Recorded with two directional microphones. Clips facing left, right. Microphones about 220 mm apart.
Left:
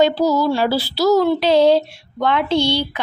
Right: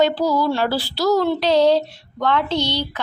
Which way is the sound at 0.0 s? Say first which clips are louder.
Left 2 dB; 10° left (ahead or behind).